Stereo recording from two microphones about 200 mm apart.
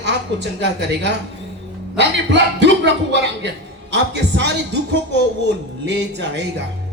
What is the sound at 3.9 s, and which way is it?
Speech, 60° right (ahead or behind).